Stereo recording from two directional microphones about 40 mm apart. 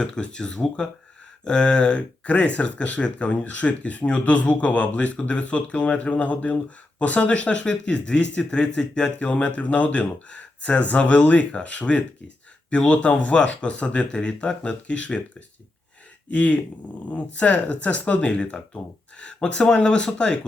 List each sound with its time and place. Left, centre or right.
0.0 s speech: left
9.1 s speech: left